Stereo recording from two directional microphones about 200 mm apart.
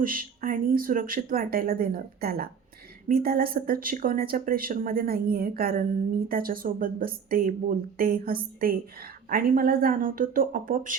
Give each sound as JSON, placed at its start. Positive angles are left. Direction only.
{"t": 0.0, "sound": "a woman's voice", "side_deg": -45}